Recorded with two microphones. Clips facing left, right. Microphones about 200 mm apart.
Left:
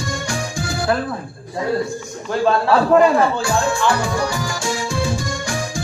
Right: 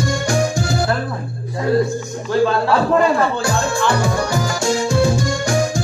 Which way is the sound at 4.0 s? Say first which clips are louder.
Right 2 dB; 40° right (ahead or behind).